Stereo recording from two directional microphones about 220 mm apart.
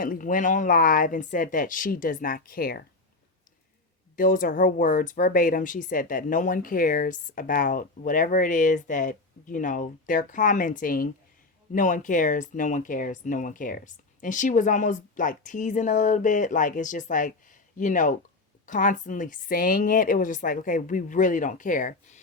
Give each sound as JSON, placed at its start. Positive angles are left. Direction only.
{"t": 0.0, "sound": "speech", "side_deg": 40}
{"t": 4.2, "sound": "speech", "side_deg": 40}